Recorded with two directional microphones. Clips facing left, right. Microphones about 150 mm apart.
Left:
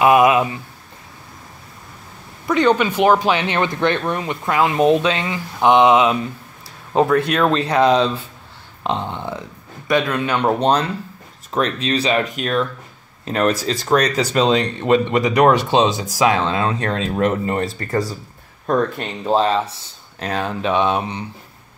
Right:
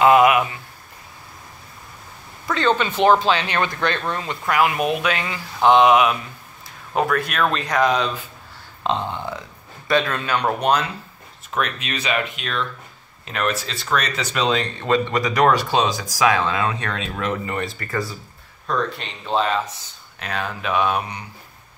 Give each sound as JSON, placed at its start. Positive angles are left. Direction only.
{"t": 0.0, "sound": "a sound", "side_deg": 20}
{"t": 2.4, "sound": "speech", "side_deg": 15}
{"t": 8.8, "sound": "speech", "side_deg": 20}
{"t": 14.5, "sound": "speech", "side_deg": 20}
{"t": 18.7, "sound": "speech", "side_deg": 50}